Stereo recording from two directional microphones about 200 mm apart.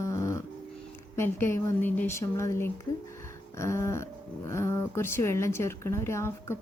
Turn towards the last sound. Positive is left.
turn(degrees=15)  # may be behind; listen again after turning